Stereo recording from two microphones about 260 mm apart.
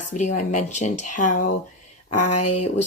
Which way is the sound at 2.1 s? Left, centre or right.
Left.